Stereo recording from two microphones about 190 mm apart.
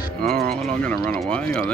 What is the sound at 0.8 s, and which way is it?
Speech, 5° left (ahead or behind).